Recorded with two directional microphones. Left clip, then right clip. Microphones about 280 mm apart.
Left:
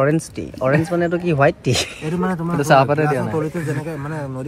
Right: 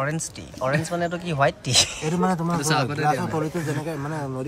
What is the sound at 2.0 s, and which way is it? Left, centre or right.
Speech, right.